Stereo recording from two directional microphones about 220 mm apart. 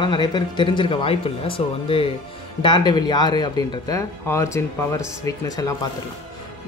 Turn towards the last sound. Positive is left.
turn(degrees=15)  # may be behind; listen again after turning